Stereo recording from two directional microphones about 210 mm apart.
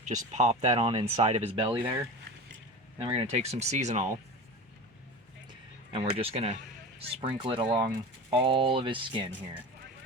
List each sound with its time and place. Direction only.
0.0 s speech: 35° right (ahead or behind)
5.5 s a sound: 25° right (ahead or behind)
7.1 s speech: 25° right (ahead or behind)